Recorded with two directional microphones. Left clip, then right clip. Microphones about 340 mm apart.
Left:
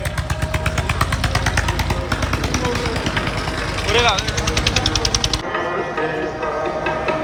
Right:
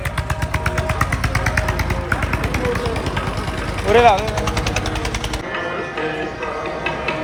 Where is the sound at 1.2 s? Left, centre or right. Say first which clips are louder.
Even; left.